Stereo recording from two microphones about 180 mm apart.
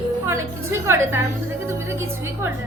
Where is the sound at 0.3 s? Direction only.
15° right (ahead or behind).